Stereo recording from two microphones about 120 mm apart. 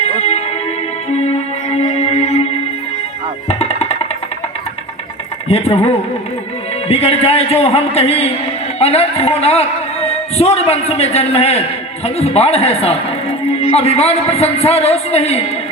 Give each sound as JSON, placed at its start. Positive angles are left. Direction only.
{"t": 0.2, "sound": "music", "side_deg": 60}
{"t": 1.8, "sound": "music", "side_deg": 60}
{"t": 3.5, "sound": "music", "side_deg": 55}
{"t": 5.5, "sound": "a man's voice", "side_deg": 55}